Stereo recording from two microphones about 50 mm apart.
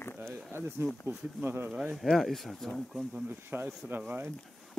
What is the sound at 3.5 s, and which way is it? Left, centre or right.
Speech, right.